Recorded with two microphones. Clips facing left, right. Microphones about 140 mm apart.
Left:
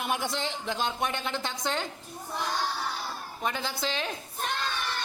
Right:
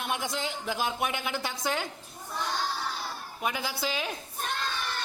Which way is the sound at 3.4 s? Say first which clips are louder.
Even; 10° right (ahead or behind).